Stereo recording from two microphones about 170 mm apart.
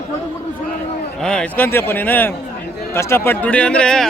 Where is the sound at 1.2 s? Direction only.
5° left (ahead or behind).